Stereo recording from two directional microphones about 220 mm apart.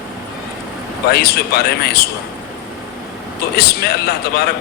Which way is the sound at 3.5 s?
45° left (ahead or behind).